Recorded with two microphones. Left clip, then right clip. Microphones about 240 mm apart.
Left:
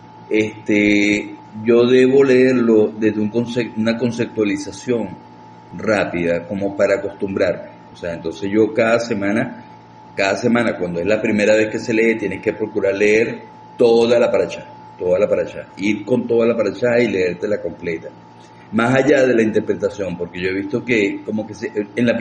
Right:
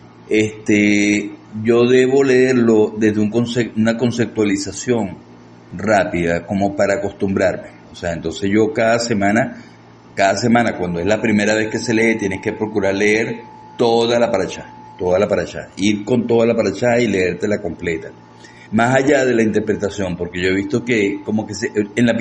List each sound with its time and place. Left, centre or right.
0.3 s mantra: right
15.1 s a man's voice: right
18.7 s mantra: right